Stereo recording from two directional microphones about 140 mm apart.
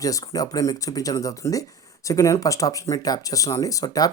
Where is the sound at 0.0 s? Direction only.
25° left (ahead or behind).